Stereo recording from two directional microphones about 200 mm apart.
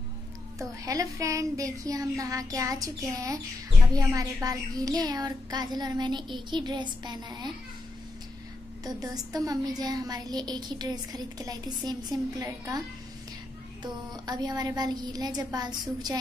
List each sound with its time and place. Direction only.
0.6 s speech: 15° right (ahead or behind)
8.8 s speech: 20° right (ahead or behind)
13.8 s speech: 20° right (ahead or behind)